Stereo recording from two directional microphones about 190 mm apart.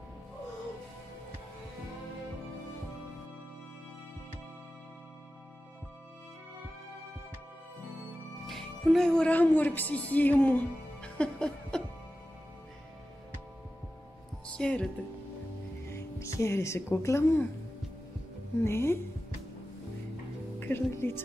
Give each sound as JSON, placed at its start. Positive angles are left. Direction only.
{"t": 8.5, "sound": "music", "side_deg": 0}
{"t": 14.5, "sound": "speech", "side_deg": 5}
{"t": 15.9, "sound": "speech", "side_deg": 15}
{"t": 18.6, "sound": "speech", "side_deg": 15}
{"t": 20.5, "sound": "music", "side_deg": 10}